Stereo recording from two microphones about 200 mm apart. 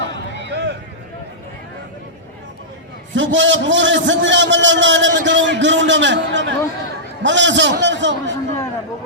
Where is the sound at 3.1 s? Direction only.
70° right (ahead or behind).